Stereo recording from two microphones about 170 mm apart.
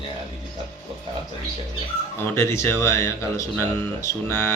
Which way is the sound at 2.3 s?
15° left (ahead or behind).